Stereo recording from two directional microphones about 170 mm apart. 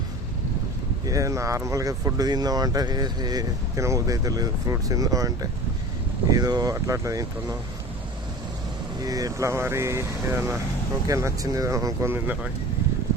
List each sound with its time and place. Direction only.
1.0 s speech: 20° right (ahead or behind)
9.0 s speech: 20° right (ahead or behind)